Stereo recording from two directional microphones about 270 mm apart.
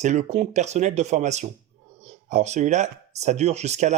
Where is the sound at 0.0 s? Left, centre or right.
Right.